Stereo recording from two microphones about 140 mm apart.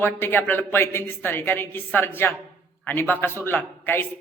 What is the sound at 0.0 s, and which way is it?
Speech, 15° left (ahead or behind).